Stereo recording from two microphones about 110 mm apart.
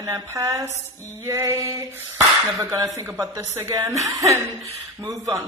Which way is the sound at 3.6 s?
30° right (ahead or behind).